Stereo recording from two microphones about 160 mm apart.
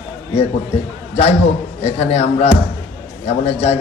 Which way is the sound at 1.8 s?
40° left (ahead or behind).